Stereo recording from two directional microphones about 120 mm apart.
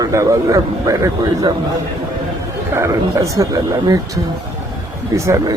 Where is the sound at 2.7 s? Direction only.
25° right (ahead or behind).